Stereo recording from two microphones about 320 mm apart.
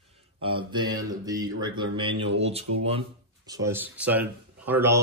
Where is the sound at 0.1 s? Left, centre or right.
Centre.